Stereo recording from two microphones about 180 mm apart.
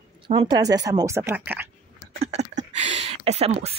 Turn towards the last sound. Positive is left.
turn(degrees=-35)  # may be behind; listen again after turning